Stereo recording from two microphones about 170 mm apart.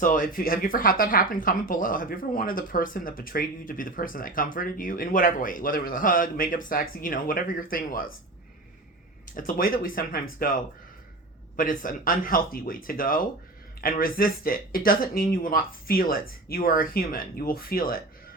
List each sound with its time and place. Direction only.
0.0 s speech: 55° left (ahead or behind)
9.3 s speech: 55° left (ahead or behind)
11.5 s speech: 50° left (ahead or behind)